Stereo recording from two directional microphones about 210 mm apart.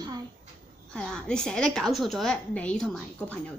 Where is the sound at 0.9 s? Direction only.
5° left (ahead or behind).